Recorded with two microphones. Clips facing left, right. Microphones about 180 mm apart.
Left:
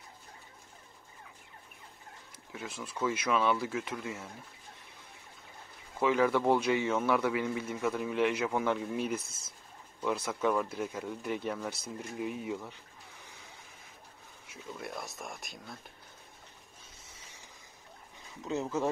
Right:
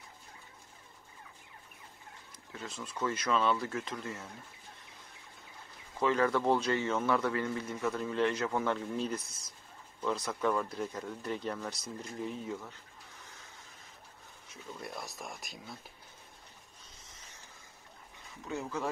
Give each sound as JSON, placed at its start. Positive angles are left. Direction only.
{"t": 2.5, "sound": "speech", "side_deg": 10}
{"t": 5.9, "sound": "speech", "side_deg": 10}
{"t": 9.2, "sound": "speech", "side_deg": 25}
{"t": 10.0, "sound": "speech", "side_deg": 5}
{"t": 12.0, "sound": "a sound", "side_deg": 10}
{"t": 14.5, "sound": "speech", "side_deg": 0}
{"t": 17.1, "sound": "a sound", "side_deg": 10}
{"t": 18.5, "sound": "speech", "side_deg": 20}